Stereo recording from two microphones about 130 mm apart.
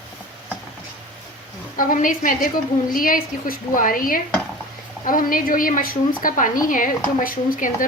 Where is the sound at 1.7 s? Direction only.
90° left.